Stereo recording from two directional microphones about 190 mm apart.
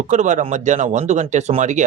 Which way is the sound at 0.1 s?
40° right (ahead or behind).